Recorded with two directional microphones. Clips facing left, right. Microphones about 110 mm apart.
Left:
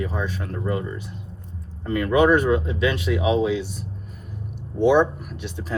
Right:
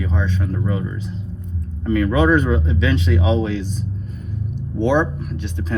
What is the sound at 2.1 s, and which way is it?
Speech, 5° left (ahead or behind).